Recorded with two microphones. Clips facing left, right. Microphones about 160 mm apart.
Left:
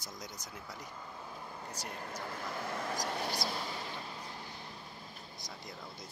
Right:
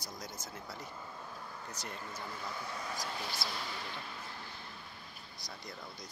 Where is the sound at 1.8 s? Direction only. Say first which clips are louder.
Left 2 dB; 55° left (ahead or behind).